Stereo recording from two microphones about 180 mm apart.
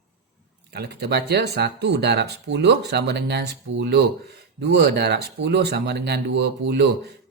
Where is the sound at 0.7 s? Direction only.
65° right (ahead or behind).